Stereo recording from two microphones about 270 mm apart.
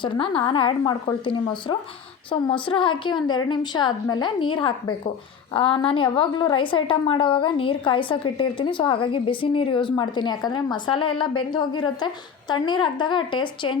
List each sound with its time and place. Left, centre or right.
0.0 s a woman's voice: centre